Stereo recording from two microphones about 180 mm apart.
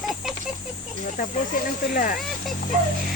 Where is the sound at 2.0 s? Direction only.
50° left (ahead or behind).